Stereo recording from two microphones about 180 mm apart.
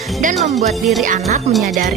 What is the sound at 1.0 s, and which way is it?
Music, 45° right (ahead or behind).